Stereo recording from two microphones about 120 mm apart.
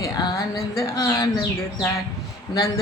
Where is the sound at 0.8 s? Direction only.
30° left (ahead or behind).